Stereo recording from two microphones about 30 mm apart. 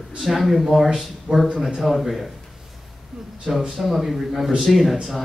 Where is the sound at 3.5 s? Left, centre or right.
Centre.